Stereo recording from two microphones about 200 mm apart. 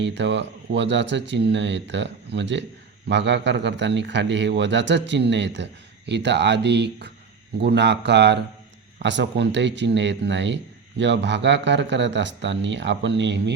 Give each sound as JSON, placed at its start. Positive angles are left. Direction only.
{"t": 0.0, "sound": "speech", "side_deg": -60}